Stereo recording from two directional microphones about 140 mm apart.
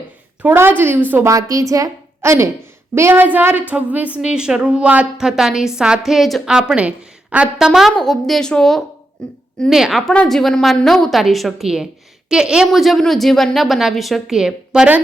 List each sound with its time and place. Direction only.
0.4 s a woman's voice: 15° right (ahead or behind)
1.3 s a woman's voice: 25° right (ahead or behind); by 15.0 s 10° right (ahead or behind)